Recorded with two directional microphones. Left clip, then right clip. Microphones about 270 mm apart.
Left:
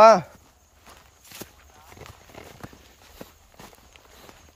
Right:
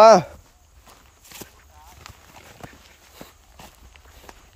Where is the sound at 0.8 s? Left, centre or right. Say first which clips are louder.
Even; centre.